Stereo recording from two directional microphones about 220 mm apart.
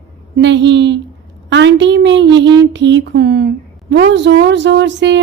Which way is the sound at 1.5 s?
55° right (ahead or behind).